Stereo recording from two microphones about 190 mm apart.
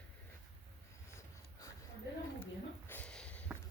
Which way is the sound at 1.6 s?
20° left (ahead or behind).